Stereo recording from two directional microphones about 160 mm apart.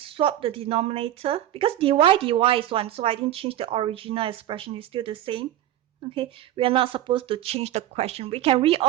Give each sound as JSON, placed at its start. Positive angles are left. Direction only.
{"t": 0.0, "sound": "a woman's voice", "side_deg": -35}